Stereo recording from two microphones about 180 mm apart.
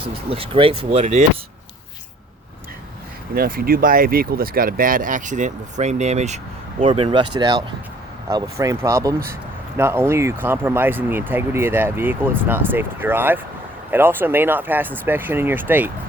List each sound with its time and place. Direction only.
0.3 s speech: 30° right (ahead or behind)
3.3 s speech: 55° right (ahead or behind); by 15.9 s 10° right (ahead or behind)